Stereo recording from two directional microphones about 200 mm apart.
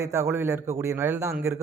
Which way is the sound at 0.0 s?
15° right (ahead or behind).